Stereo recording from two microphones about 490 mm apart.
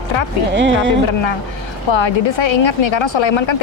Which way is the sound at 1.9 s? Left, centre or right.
Left.